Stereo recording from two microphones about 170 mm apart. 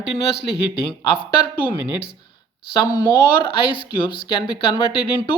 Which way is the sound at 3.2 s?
30° left (ahead or behind).